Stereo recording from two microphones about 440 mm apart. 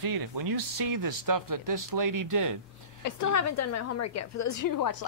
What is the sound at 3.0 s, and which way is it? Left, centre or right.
A woman's voice, left.